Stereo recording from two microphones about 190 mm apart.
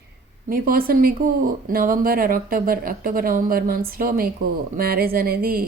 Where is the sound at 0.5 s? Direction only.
50° right (ahead or behind).